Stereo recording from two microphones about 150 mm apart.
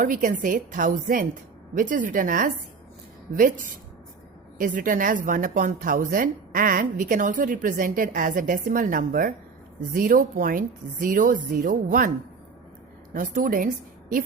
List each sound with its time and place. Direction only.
0.0 s speech: 65° right (ahead or behind)
13.1 s speech: 65° right (ahead or behind)